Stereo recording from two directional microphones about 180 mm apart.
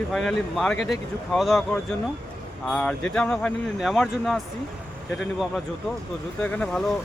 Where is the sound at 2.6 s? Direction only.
5° left (ahead or behind).